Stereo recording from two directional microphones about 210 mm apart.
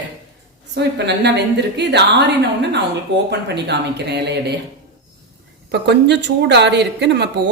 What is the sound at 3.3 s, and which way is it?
A woman's voice, 50° right (ahead or behind).